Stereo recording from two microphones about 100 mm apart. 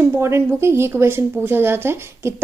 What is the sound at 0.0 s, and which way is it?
Speech, 25° right (ahead or behind).